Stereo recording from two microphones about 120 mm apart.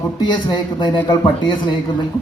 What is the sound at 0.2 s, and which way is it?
Speech, 40° left (ahead or behind).